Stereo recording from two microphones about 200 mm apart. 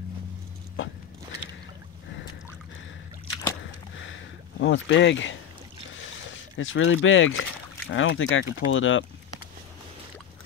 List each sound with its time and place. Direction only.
4.6 s speech: 65° left (ahead or behind)
6.3 s speech: 75° left (ahead or behind)